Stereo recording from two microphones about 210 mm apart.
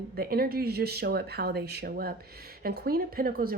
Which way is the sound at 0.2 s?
45° right (ahead or behind).